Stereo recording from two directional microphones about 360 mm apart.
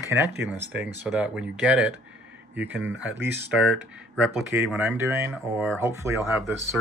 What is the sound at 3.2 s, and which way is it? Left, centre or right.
Speech, centre.